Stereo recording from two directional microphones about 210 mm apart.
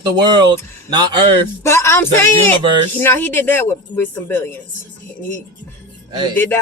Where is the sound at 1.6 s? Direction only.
15° left (ahead or behind).